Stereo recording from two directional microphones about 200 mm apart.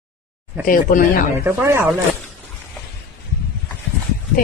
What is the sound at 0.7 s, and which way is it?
Speech, 45° left (ahead or behind).